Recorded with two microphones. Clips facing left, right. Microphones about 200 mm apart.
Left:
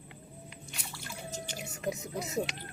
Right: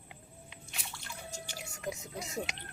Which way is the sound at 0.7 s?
Centre (ahead or behind).